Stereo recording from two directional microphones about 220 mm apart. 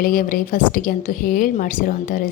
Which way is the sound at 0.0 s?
40° left (ahead or behind).